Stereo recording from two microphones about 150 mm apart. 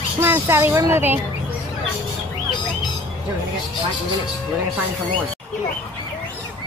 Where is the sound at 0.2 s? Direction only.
15° right (ahead or behind).